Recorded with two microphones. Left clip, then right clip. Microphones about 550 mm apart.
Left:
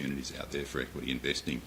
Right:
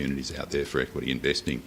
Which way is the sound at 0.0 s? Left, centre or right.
Right.